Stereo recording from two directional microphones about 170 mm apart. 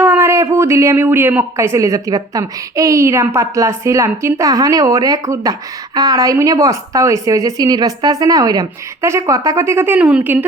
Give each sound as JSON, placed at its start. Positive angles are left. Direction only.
{"t": 0.0, "sound": "speech", "side_deg": -15}